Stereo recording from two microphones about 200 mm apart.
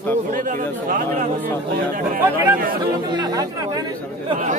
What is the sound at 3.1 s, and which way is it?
Speech, 20° right (ahead or behind).